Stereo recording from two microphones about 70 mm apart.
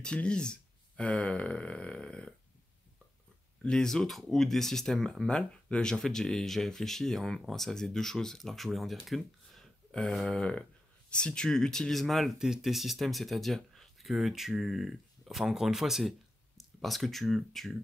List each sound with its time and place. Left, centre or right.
0.0 s speech: centre
3.6 s speech: centre